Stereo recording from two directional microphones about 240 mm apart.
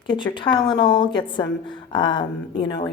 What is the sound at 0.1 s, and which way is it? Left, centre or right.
A woman's voice, centre.